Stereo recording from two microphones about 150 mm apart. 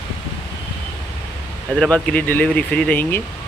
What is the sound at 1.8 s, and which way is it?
Speech, 10° left (ahead or behind).